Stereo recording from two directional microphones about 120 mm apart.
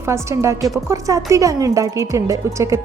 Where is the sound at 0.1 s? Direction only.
25° right (ahead or behind).